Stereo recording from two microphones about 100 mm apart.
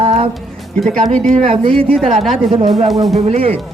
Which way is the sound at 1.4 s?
90° right.